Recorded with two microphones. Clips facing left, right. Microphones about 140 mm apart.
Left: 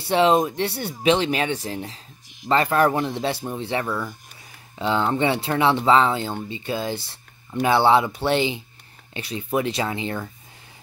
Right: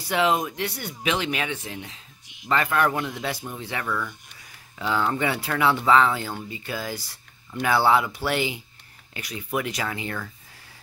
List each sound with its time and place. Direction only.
0.0 s speech: 30° left (ahead or behind)